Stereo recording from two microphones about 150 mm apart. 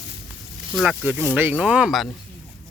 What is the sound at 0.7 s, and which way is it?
Speech, 5° right (ahead or behind).